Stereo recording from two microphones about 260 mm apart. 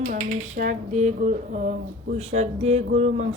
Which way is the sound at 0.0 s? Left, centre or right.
Right.